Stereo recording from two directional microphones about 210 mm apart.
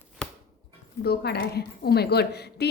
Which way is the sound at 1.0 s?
50° left (ahead or behind).